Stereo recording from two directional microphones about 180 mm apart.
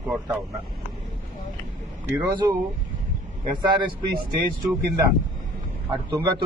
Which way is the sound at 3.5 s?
25° right (ahead or behind).